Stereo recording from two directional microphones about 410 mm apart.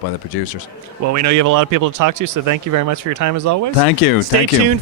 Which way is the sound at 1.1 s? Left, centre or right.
Right.